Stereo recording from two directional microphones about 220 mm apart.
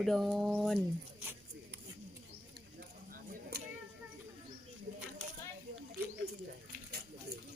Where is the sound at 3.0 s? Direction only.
40° right (ahead or behind).